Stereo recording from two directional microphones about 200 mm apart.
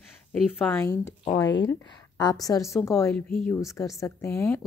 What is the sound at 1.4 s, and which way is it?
Speech, 65° left (ahead or behind).